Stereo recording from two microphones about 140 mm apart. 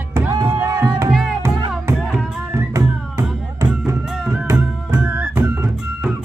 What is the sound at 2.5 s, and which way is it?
Music, 20° right (ahead or behind).